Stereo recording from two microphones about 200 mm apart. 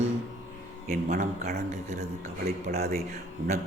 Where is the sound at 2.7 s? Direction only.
50° right (ahead or behind).